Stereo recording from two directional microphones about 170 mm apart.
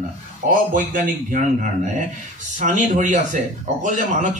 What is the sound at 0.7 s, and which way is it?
Speech, 55° right (ahead or behind).